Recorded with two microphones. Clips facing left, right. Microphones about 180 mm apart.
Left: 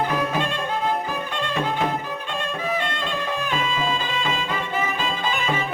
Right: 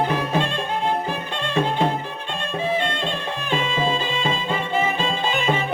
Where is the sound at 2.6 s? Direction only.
25° right (ahead or behind).